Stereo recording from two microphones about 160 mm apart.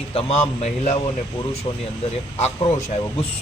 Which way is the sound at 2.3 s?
40° left (ahead or behind).